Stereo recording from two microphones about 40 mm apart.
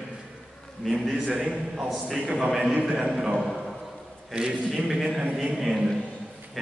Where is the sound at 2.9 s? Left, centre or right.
Right.